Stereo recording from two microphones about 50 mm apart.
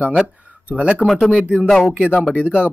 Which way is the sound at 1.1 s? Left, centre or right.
Centre.